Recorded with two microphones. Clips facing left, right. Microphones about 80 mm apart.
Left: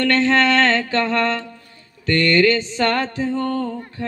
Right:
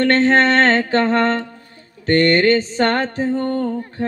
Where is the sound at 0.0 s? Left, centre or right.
Right.